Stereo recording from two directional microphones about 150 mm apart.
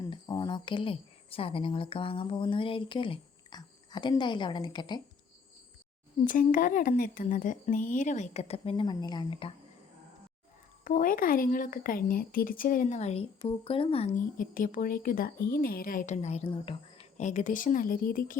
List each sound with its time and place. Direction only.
0.0 s speech: 25° left (ahead or behind)
6.2 s speech: 65° left (ahead or behind); by 9.5 s 30° left (ahead or behind)
10.8 s speech: 65° left (ahead or behind); by 14.2 s 40° left (ahead or behind)
14.3 s speech: 65° left (ahead or behind); by 16.7 s 40° left (ahead or behind)
17.2 s speech: 55° left (ahead or behind); by 18.3 s 70° left (ahead or behind)